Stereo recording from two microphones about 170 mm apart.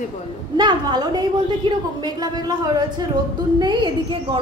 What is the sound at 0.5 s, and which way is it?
A woman's voice, 25° right (ahead or behind).